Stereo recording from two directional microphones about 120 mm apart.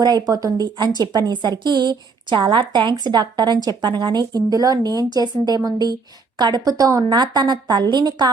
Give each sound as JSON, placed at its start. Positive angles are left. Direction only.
{"t": 0.0, "sound": "a woman's voice", "side_deg": -35}